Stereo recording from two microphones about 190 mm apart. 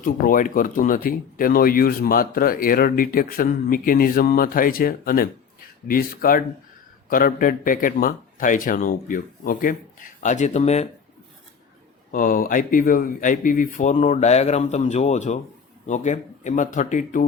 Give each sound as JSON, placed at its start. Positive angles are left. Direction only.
{"t": 0.0, "sound": "speech", "side_deg": 45}
{"t": 12.1, "sound": "speech", "side_deg": 45}